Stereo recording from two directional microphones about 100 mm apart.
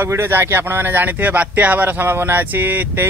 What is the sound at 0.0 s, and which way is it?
Speech, 25° right (ahead or behind).